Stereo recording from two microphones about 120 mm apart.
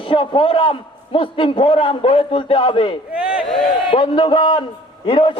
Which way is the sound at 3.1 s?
10° right (ahead or behind).